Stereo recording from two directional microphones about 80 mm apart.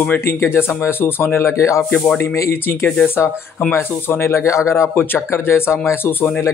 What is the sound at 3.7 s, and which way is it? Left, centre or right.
Speech, left.